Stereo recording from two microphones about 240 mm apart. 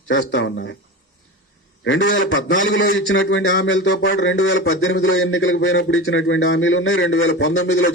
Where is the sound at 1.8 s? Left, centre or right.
Left.